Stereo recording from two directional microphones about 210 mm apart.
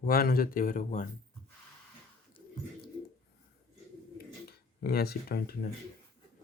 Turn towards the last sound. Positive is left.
turn(degrees=45)  # may be behind; listen again after turning